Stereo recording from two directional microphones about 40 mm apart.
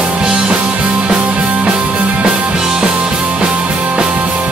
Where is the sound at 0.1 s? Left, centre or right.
Right.